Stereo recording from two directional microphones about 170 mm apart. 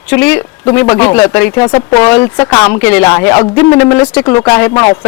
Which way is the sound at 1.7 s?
35° left (ahead or behind).